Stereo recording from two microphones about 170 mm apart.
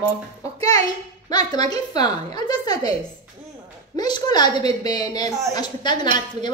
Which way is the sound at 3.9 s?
25° left (ahead or behind).